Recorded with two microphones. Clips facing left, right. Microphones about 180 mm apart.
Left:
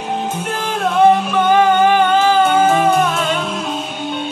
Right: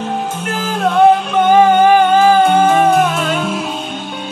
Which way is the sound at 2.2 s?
Centre (ahead or behind).